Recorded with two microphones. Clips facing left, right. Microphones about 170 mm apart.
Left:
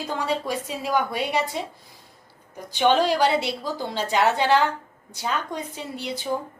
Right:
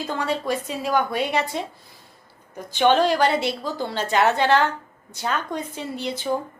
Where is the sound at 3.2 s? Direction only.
55° right (ahead or behind).